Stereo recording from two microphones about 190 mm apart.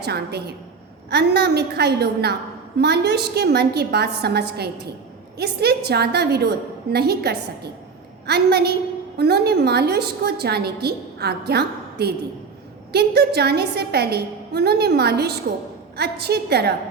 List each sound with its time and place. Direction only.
0.0 s a woman's voice: 60° right (ahead or behind)